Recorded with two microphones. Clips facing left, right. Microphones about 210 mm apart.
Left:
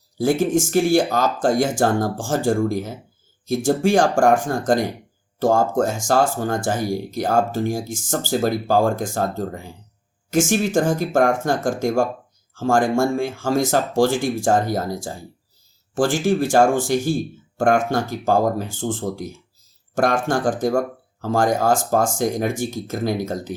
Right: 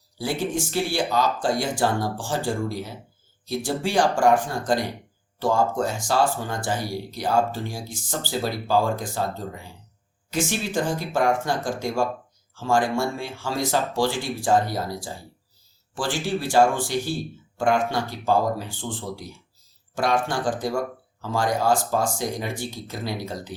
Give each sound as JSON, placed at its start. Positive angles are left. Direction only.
{"t": 0.2, "sound": "speech", "side_deg": 45}